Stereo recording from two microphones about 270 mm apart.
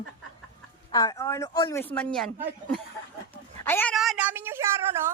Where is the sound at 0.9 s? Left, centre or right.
Centre.